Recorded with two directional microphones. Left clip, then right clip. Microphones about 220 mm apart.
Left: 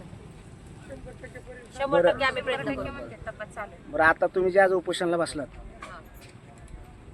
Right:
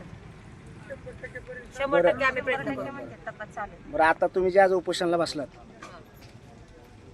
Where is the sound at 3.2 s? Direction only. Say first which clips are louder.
Right 1 dB; 40° left (ahead or behind).